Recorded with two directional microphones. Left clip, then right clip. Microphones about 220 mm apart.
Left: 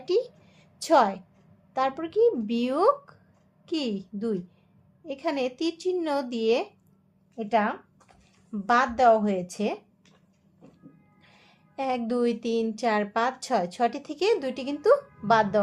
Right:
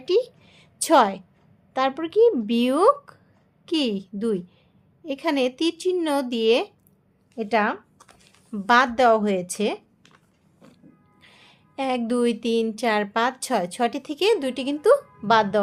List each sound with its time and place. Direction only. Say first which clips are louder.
0.0 s a sound: right 4 dB; 25° right (ahead or behind)
1.7 s a woman's voice: right 4 dB; 25° right (ahead or behind)
11.2 s a woman's voice: right 7 dB; 20° right (ahead or behind)